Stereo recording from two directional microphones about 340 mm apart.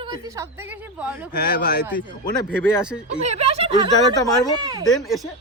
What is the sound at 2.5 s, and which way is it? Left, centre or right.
Speech, centre.